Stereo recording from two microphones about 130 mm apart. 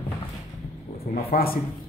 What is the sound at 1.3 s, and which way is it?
Speech, 90° left.